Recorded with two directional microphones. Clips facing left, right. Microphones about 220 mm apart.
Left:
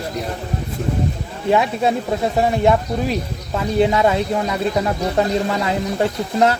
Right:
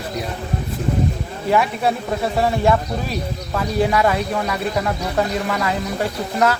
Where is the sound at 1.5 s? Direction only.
20° left (ahead or behind).